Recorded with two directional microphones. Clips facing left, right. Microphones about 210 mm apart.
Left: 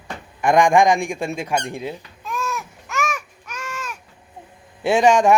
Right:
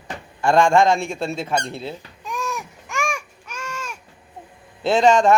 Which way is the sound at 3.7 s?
10° right (ahead or behind).